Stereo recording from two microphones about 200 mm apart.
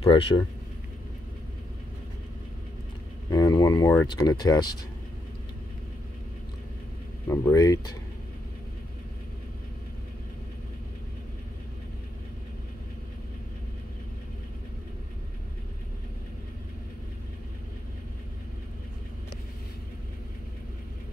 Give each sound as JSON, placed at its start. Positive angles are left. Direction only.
{"t": 0.0, "sound": "speech", "side_deg": 25}
{"t": 3.3, "sound": "speech", "side_deg": 20}
{"t": 7.2, "sound": "speech", "side_deg": 15}